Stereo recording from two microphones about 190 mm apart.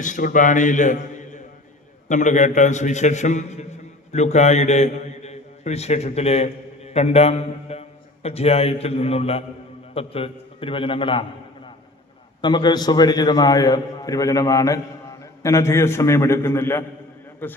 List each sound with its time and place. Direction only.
0.0 s a man's voice: 45° left (ahead or behind); by 17.6 s 10° left (ahead or behind)